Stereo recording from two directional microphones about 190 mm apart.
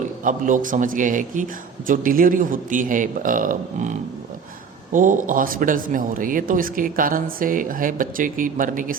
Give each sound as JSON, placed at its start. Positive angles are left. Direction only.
{"t": 0.0, "sound": "a man's voice", "side_deg": -45}